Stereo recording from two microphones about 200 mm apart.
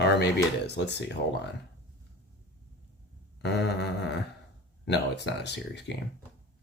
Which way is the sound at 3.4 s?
55° left (ahead or behind).